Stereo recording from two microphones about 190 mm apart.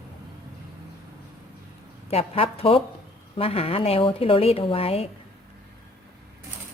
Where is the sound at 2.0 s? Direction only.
30° left (ahead or behind).